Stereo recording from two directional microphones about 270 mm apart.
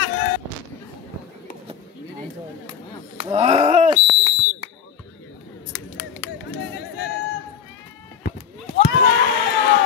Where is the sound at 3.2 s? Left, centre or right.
Centre.